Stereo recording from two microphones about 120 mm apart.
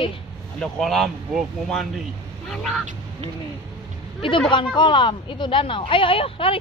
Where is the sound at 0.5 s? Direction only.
Centre (ahead or behind).